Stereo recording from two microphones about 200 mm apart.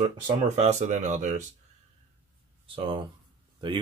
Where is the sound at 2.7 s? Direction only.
25° right (ahead or behind).